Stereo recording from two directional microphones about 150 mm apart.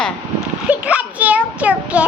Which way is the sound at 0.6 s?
10° right (ahead or behind).